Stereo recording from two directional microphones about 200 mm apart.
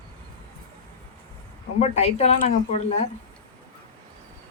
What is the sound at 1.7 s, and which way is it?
Speech, 35° left (ahead or behind).